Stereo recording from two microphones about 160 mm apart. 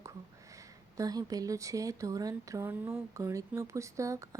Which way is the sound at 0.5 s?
20° right (ahead or behind).